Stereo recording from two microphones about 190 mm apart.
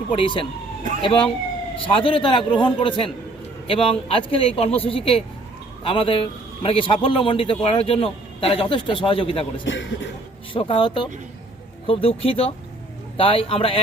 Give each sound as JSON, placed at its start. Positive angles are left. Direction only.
{"t": 0.1, "sound": "a man's voice", "side_deg": 25}
{"t": 9.6, "sound": "speech", "side_deg": 70}
{"t": 10.5, "sound": "a man's voice", "side_deg": 25}